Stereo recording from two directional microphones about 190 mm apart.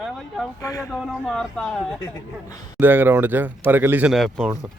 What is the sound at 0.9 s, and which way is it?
Speech, centre (ahead or behind).